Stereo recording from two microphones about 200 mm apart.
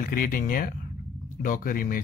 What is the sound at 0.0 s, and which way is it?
Speech, 45° left (ahead or behind).